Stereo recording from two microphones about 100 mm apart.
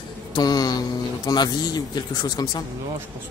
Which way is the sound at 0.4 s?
40° left (ahead or behind).